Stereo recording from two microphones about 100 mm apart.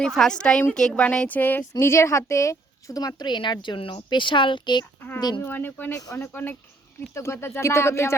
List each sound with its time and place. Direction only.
0.0 s speech: 5° left (ahead or behind); by 4.9 s 50° left (ahead or behind)
5.4 s speech: 20° left (ahead or behind)